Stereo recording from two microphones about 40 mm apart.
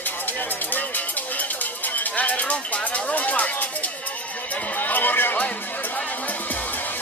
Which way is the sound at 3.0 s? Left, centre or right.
Left.